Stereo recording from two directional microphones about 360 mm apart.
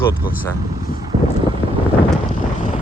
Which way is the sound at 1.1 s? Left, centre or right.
Centre.